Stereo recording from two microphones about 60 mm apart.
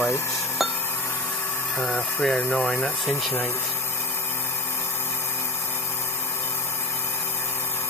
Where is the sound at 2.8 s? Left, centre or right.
Left.